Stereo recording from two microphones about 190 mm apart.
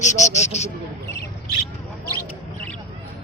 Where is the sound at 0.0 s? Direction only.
40° left (ahead or behind).